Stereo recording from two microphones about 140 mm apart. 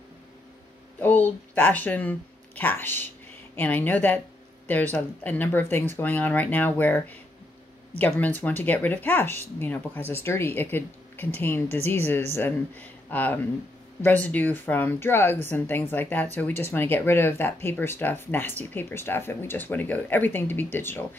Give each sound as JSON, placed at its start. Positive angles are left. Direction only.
{"t": 0.9, "sound": "speech", "side_deg": 15}